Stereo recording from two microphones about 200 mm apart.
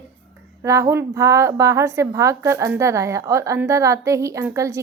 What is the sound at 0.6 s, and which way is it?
A woman's voice, 15° right (ahead or behind).